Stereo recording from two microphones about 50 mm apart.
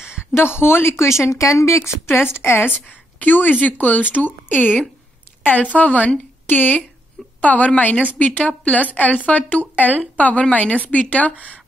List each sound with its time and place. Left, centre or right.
0.0 s a sound: centre
0.3 s speech: left
2.0 s a woman's voice: left
2.7 s a woman's voice: left